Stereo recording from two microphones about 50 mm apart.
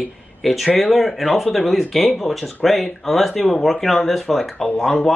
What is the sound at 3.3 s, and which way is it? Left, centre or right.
Speech, centre.